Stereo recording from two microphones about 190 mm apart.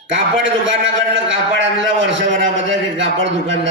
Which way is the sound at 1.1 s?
80° right.